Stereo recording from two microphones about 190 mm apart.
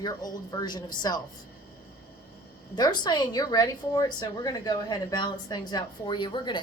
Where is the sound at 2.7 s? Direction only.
20° left (ahead or behind).